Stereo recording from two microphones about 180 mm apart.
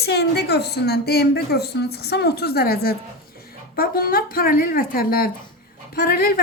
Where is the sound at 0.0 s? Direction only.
65° left (ahead or behind).